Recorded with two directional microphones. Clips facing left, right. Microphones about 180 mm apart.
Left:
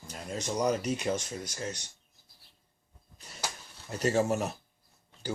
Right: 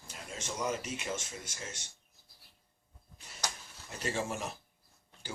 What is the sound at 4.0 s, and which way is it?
Speech, 40° left (ahead or behind).